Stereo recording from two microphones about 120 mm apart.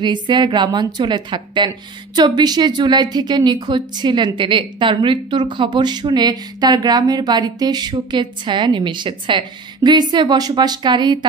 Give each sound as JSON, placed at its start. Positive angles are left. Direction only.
{"t": 0.0, "sound": "a woman's voice", "side_deg": -40}